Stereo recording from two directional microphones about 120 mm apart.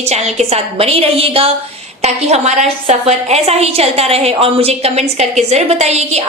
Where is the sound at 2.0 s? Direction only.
65° right (ahead or behind).